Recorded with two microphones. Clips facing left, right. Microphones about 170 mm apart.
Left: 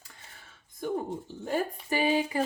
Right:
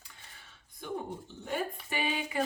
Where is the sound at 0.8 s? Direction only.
40° left (ahead or behind).